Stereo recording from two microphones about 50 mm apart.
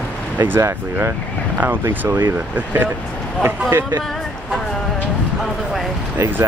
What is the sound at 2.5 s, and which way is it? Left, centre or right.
Speech, right.